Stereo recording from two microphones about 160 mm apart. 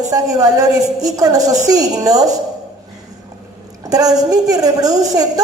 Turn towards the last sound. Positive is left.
turn(degrees=-25)  # may be behind; listen again after turning